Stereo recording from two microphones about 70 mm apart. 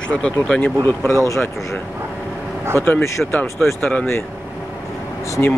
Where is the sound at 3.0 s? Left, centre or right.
Left.